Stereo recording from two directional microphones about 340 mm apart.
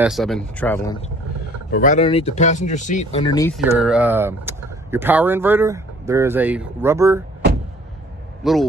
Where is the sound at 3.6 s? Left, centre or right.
Centre.